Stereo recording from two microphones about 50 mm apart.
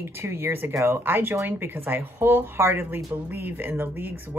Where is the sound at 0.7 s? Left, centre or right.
Right.